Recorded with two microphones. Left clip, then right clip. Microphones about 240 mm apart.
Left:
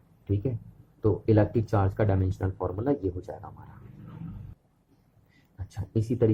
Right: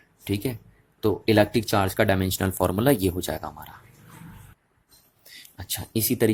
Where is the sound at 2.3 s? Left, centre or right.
Right.